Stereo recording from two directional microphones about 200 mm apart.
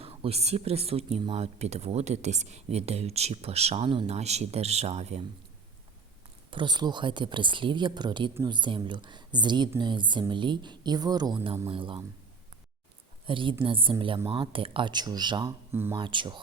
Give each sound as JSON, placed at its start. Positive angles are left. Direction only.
{"t": 0.0, "sound": "speech", "side_deg": -30}
{"t": 6.5, "sound": "a woman's voice", "side_deg": -20}
{"t": 13.2, "sound": "a woman's voice", "side_deg": -25}
{"t": 15.7, "sound": "speech", "side_deg": -10}
{"t": 16.0, "sound": "a woman's voice", "side_deg": -25}